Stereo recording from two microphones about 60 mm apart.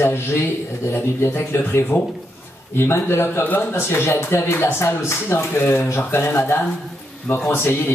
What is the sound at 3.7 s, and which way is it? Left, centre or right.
Speech, left.